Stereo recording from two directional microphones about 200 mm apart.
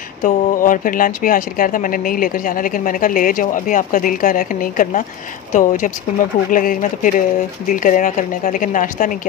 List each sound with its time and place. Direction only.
0.2 s speech: 40° left (ahead or behind)